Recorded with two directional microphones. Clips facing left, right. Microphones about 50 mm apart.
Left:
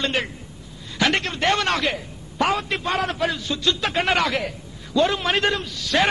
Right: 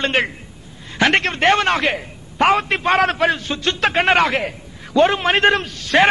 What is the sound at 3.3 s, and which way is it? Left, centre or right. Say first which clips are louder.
A man's voice: right 4 dB; right.